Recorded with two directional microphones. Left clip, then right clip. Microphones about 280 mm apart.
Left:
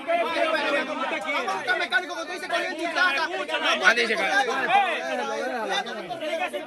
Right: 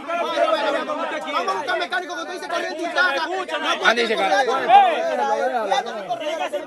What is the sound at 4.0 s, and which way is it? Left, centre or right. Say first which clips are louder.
Speech: right 4 dB; centre.